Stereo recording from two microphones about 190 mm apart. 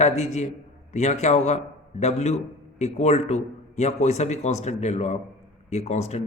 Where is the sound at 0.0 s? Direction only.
35° left (ahead or behind).